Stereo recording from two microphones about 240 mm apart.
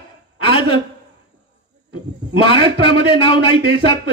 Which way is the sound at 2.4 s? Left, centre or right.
Left.